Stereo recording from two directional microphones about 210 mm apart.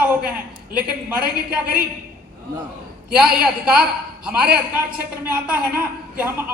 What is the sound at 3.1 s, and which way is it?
A man's voice, 5° right (ahead or behind).